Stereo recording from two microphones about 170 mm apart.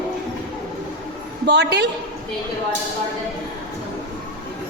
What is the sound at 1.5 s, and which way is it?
Speech, 90° right.